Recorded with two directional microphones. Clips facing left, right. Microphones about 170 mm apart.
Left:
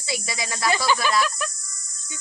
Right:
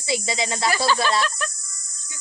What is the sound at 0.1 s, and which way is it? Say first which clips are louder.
Speech: right 5 dB; 25° right (ahead or behind).